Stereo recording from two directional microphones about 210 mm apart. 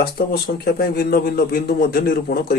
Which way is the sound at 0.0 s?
50° left (ahead or behind).